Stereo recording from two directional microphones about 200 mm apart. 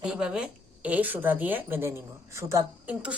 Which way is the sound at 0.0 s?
5° right (ahead or behind).